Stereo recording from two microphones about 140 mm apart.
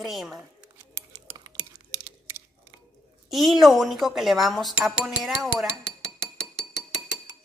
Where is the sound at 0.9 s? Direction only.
25° right (ahead or behind).